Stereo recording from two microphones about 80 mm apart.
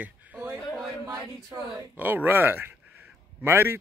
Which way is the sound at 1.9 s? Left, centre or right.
Right.